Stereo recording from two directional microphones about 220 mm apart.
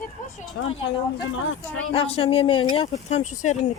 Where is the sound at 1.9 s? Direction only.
25° left (ahead or behind).